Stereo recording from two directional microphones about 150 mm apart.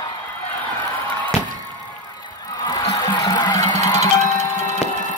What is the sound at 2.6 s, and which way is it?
Music, 25° left (ahead or behind).